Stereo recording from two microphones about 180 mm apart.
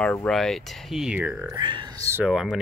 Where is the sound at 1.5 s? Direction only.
25° right (ahead or behind).